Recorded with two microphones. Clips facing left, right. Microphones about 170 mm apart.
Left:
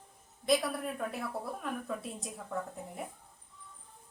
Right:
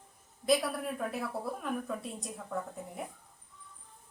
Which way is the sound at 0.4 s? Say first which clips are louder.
Right 1 dB; centre (ahead or behind).